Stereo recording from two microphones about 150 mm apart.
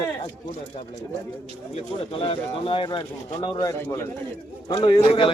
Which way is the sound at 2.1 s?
35° left (ahead or behind).